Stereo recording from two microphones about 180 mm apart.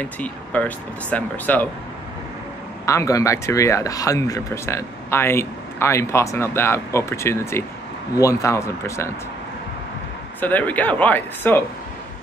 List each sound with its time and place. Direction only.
0.0 s speech: 10° left (ahead or behind)
2.8 s speech: 15° left (ahead or behind)
10.4 s speech: 10° left (ahead or behind)